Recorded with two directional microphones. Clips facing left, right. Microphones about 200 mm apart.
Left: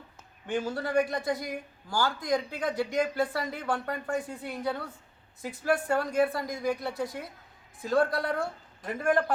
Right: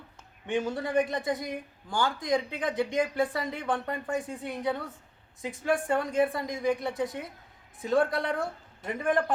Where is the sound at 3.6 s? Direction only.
20° right (ahead or behind).